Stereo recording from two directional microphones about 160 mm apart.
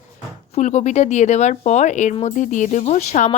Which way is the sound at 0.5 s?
45° left (ahead or behind).